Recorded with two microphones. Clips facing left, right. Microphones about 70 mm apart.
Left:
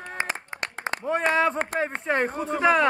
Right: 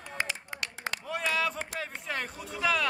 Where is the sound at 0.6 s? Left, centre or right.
Left.